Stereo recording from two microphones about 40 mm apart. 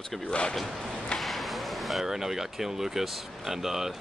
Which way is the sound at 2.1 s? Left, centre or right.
Centre.